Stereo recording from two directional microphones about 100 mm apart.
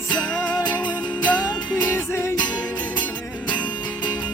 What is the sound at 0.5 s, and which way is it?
Music, 45° left (ahead or behind).